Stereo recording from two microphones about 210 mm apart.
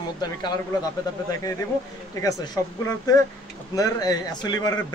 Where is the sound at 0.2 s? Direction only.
20° left (ahead or behind).